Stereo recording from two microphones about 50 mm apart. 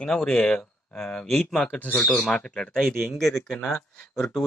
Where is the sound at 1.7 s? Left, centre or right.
Left.